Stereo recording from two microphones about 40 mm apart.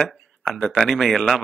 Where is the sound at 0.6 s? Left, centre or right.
Centre.